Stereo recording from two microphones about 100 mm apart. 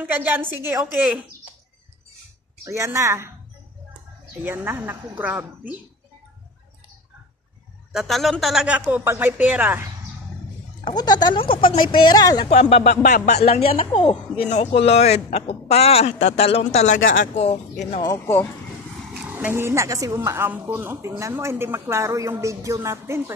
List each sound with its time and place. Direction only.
0.0 s speech: 20° right (ahead or behind)
2.6 s speech: 30° right (ahead or behind)
4.4 s speech: 20° right (ahead or behind)
7.9 s a woman's voice: centre (ahead or behind)
8.6 s speech: 15° right (ahead or behind)
11.0 s speech: 45° left (ahead or behind)
12.4 s speech: 90° left
18.0 s speech: 30° left (ahead or behind)
19.1 s a woman's voice: 15° right (ahead or behind); by 20.2 s 35° right (ahead or behind)
20.2 s speech: 20° right (ahead or behind)